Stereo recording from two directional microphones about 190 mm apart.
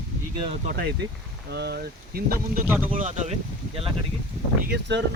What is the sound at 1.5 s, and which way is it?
Speech, 60° right (ahead or behind).